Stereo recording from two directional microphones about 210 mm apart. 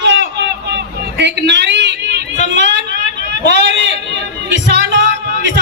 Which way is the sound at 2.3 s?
35° left (ahead or behind).